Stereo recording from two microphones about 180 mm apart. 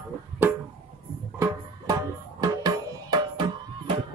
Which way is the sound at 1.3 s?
20° right (ahead or behind).